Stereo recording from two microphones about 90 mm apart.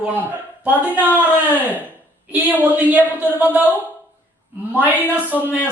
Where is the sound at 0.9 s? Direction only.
20° right (ahead or behind).